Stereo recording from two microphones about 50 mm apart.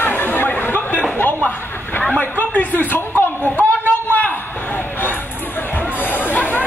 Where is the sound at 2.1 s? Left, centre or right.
Left.